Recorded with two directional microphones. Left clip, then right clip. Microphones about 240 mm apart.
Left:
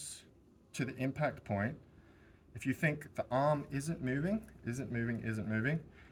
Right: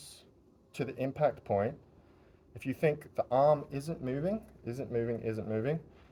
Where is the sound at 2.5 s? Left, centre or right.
Centre.